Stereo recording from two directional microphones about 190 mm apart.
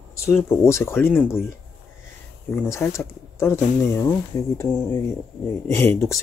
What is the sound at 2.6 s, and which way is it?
Speech, 15° left (ahead or behind).